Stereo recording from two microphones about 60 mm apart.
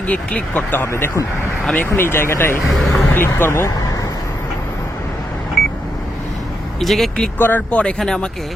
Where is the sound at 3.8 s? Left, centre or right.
Left.